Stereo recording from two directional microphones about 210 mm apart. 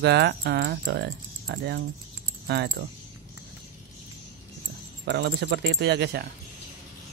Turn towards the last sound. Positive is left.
turn(degrees=-50)  # may be behind; listen again after turning